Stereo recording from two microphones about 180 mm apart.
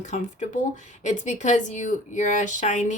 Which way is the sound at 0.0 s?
40° left (ahead or behind).